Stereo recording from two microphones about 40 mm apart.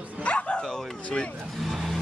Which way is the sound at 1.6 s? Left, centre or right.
Centre.